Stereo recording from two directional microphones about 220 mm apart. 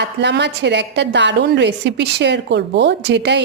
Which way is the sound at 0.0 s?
50° right (ahead or behind).